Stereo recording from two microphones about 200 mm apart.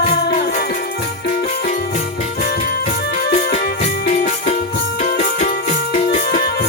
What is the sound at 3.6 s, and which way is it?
Music, 40° left (ahead or behind).